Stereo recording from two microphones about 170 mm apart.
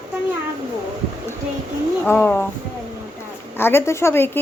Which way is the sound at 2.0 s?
10° left (ahead or behind).